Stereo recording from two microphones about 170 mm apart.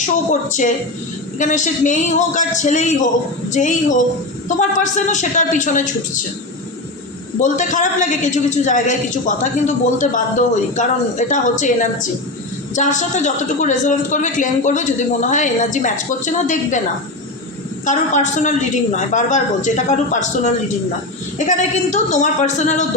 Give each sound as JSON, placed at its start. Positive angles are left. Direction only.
{"t": 0.0, "sound": "a man's voice", "side_deg": 45}
{"t": 7.4, "sound": "a man's voice", "side_deg": 50}
{"t": 17.8, "sound": "a man's voice", "side_deg": 45}